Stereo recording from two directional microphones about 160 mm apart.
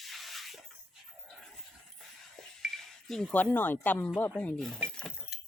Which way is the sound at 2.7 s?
5° left (ahead or behind).